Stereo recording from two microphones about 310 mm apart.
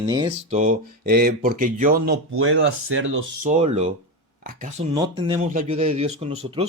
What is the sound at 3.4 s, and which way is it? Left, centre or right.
Speech, right.